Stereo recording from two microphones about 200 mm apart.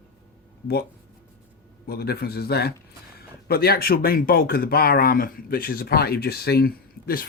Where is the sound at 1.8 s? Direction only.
50° left (ahead or behind).